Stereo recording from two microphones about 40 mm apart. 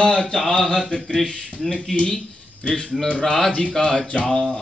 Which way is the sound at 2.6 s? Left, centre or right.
Left.